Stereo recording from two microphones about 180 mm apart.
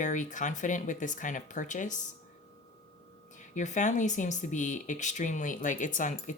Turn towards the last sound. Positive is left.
turn(degrees=45)  # may be behind; listen again after turning